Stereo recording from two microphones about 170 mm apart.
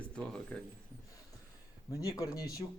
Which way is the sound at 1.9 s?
20° left (ahead or behind).